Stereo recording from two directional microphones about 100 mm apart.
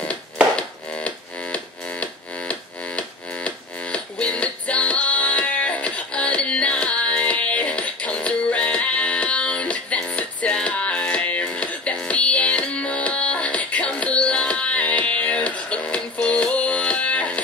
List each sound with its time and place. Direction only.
0.0 s music: 10° left (ahead or behind)